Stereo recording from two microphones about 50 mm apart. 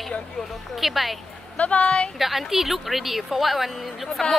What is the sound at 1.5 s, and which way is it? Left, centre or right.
Speech, left.